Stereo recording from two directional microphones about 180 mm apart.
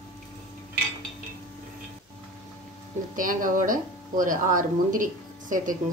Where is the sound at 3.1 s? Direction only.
50° right (ahead or behind).